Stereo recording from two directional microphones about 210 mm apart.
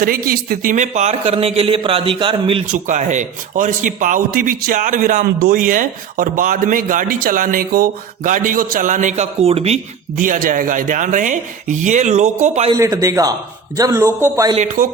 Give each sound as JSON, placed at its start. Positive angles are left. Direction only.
{"t": 0.0, "sound": "a man's voice", "side_deg": -45}
{"t": 2.8, "sound": "a man's voice", "side_deg": -35}
{"t": 12.7, "sound": "a man's voice", "side_deg": -15}
{"t": 14.5, "sound": "a man's voice", "side_deg": -35}